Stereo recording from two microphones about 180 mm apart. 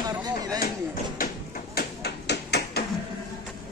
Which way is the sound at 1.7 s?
65° left (ahead or behind).